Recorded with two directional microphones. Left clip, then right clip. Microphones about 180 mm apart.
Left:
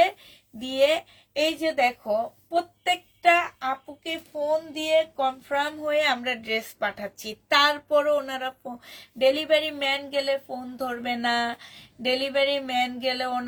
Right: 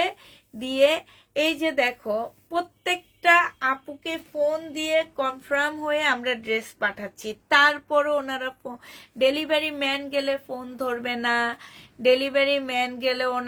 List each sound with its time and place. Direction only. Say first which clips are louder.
0.6 s a woman's voice: right 2 dB; 35° right (ahead or behind)